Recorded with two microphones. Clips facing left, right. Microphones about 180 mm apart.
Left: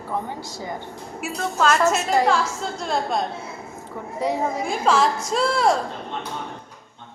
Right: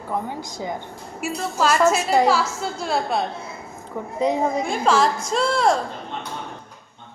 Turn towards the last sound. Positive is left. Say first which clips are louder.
# even
turn(degrees=0)  # may be behind; listen again after turning